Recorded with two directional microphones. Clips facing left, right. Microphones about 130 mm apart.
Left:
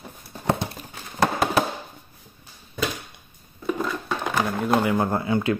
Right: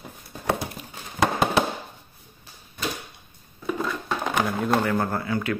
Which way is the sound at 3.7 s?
5° left (ahead or behind).